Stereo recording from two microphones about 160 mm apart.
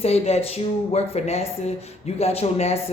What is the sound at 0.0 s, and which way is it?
A man's voice, 40° left (ahead or behind).